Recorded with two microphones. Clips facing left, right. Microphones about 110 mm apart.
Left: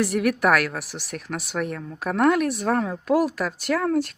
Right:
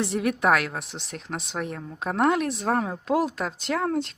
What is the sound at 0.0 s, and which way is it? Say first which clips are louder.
A woman's voice: left 3 dB; 25° right (ahead or behind).